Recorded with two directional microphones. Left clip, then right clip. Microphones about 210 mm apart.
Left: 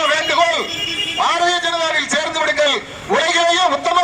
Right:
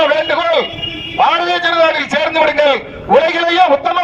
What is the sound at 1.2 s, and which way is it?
A man's voice, 50° right (ahead or behind).